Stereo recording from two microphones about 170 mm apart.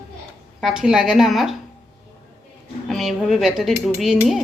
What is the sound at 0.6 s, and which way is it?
Speech, centre (ahead or behind).